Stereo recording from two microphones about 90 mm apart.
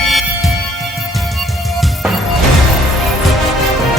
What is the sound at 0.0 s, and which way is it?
Music, centre (ahead or behind).